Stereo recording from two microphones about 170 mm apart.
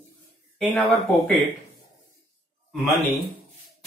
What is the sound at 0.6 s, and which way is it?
Speech, 10° left (ahead or behind).